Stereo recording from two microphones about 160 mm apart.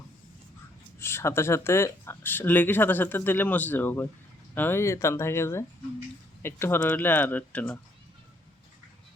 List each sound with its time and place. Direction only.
0.9 s speech: 15° left (ahead or behind)